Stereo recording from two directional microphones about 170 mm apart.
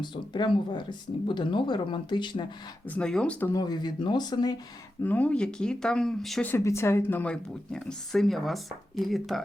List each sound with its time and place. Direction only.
0.0 s speech: 25° left (ahead or behind)
2.8 s speech: 5° left (ahead or behind)
3.5 s speech: 25° left (ahead or behind)
5.0 s speech: 10° left (ahead or behind)
6.5 s speech: 15° left (ahead or behind)